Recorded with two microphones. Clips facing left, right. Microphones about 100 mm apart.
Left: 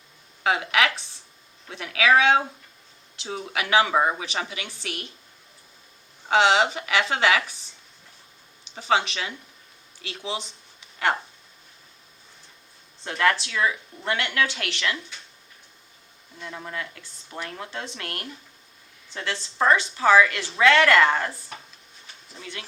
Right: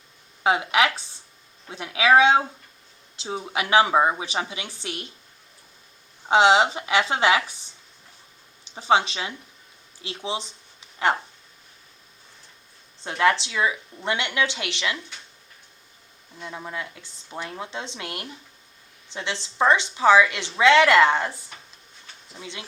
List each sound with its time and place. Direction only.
0.4 s speech: 25° right (ahead or behind)
6.2 s speech: 25° right (ahead or behind)
8.7 s speech: 25° right (ahead or behind)
13.1 s speech: 25° right (ahead or behind)
16.4 s speech: 15° right (ahead or behind)
22.4 s speech: 20° right (ahead or behind)